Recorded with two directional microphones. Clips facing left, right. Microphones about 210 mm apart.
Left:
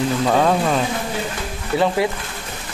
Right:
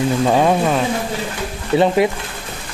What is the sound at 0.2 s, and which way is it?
Speech, 15° right (ahead or behind).